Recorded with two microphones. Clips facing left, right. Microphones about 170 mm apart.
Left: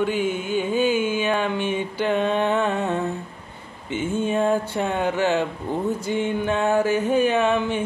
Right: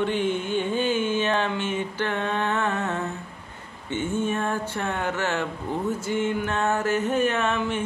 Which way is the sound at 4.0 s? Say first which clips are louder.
Left 4 dB; 15° left (ahead or behind).